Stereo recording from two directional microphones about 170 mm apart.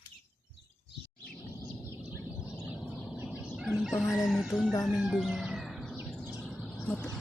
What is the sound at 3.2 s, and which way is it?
Chicken, 5° right (ahead or behind).